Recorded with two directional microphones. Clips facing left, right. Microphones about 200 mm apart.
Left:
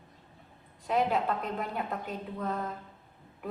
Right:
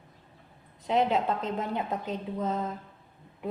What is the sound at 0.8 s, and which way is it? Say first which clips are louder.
A woman's voice: right 2 dB; 20° right (ahead or behind).